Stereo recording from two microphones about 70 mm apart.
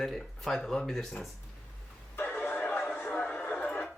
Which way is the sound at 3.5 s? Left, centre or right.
Left.